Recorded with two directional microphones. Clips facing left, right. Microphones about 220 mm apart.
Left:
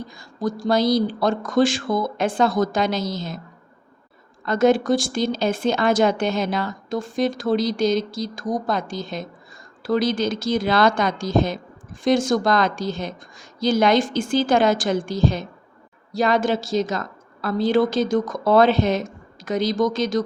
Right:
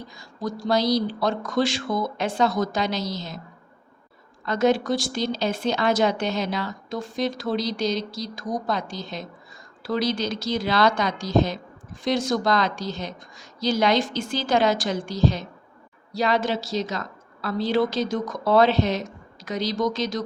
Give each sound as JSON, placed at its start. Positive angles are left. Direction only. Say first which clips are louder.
{"t": 0.1, "sound": "a woman's voice", "louder": "left 4 dB", "side_deg": 50}
{"t": 4.4, "sound": "a woman's voice", "louder": "left 4 dB", "side_deg": 50}